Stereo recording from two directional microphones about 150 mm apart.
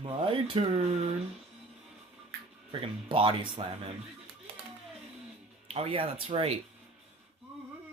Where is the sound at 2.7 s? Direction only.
35° right (ahead or behind).